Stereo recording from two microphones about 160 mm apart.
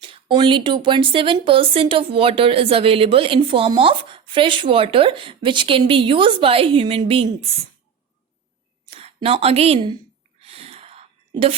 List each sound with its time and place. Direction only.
0.0 s speech: 30° right (ahead or behind)
8.9 s a woman's voice: 40° right (ahead or behind)
10.4 s a sound: 40° right (ahead or behind)